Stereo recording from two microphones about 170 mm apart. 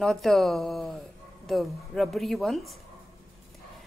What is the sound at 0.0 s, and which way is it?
Speech, centre (ahead or behind).